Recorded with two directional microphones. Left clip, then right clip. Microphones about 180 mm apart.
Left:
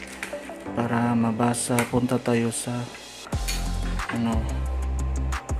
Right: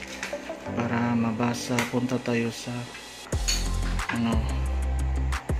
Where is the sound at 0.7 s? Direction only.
20° left (ahead or behind).